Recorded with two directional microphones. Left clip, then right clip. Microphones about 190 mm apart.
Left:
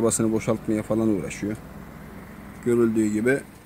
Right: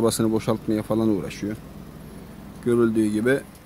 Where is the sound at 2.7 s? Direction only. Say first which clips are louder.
Right 1 dB; 10° right (ahead or behind).